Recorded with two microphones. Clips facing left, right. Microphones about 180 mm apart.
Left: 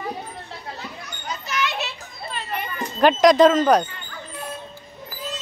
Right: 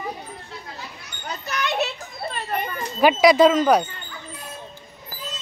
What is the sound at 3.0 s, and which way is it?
Speech, 10° right (ahead or behind).